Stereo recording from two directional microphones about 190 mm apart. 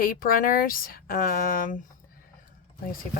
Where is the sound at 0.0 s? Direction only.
50° left (ahead or behind).